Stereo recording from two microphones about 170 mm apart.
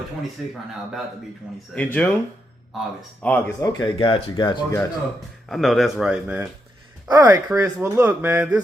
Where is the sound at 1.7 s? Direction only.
10° left (ahead or behind).